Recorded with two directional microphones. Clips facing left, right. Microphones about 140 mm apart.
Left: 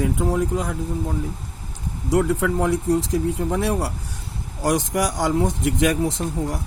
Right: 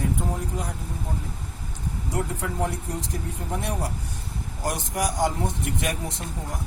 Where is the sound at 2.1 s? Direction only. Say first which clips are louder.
Left 11 dB; 90° left.